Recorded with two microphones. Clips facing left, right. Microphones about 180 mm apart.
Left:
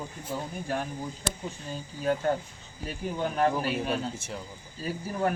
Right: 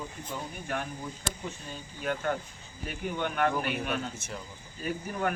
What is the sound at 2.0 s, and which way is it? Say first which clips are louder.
Speech: left 4 dB; 30° left (ahead or behind).